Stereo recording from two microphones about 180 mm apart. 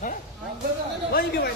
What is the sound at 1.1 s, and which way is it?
Speech, 60° left (ahead or behind).